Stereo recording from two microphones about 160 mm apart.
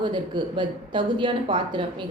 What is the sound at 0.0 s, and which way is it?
A woman's voice, 30° right (ahead or behind).